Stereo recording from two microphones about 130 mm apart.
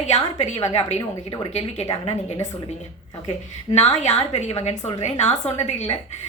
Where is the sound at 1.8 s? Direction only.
30° left (ahead or behind).